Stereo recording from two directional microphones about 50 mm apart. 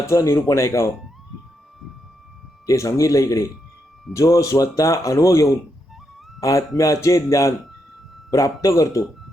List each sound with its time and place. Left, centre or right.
0.0 s speech: left
2.7 s speech: left
4.1 s speech: left
8.6 s speech: left